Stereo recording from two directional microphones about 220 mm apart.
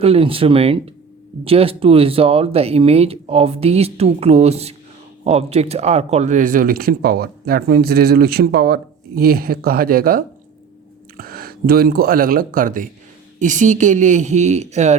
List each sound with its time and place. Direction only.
0.0 s speech: 25° right (ahead or behind)